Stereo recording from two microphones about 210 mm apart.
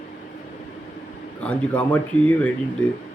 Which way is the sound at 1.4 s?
5° left (ahead or behind).